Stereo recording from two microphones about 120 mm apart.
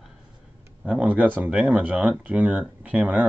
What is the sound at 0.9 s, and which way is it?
Speech, 10° right (ahead or behind).